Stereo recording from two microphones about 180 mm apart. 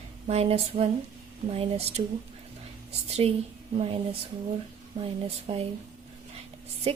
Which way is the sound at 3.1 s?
35° right (ahead or behind).